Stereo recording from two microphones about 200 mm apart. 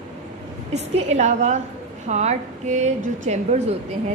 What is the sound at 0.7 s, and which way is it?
A woman's voice, 35° right (ahead or behind).